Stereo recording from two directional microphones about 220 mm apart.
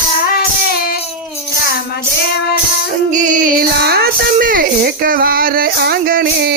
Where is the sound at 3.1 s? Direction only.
35° right (ahead or behind).